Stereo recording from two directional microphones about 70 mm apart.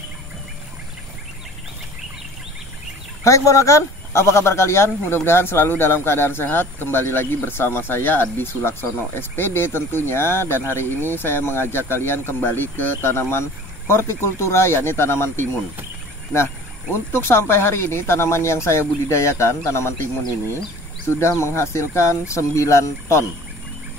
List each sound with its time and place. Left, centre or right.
3.3 s speech: left
17.1 s speech: left
21.2 s speech: left